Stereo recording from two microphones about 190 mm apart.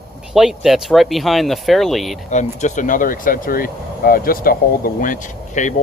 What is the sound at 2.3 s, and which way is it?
Speech, 40° left (ahead or behind).